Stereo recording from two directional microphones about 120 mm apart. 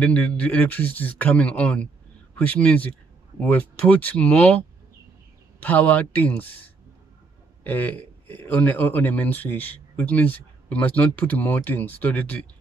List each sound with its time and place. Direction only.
0.0 s a man's voice: 10° left (ahead or behind)
5.6 s a man's voice: 15° left (ahead or behind)
7.6 s a man's voice: 15° left (ahead or behind)